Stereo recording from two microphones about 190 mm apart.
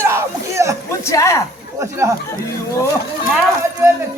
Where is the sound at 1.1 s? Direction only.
15° left (ahead or behind).